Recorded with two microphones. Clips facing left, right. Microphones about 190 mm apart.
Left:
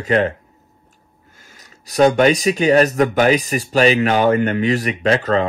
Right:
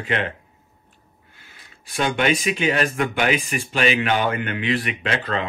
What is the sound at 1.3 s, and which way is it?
Speech, 40° left (ahead or behind).